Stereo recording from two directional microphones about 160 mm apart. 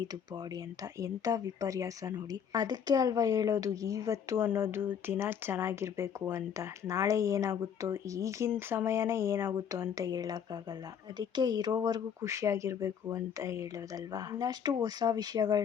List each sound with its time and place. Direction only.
0.9 s a woman's voice: 20° right (ahead or behind)